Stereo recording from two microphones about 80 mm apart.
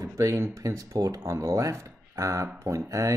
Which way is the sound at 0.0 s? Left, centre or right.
Right.